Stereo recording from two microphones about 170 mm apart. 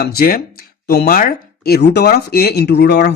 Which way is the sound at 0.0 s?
60° left (ahead or behind).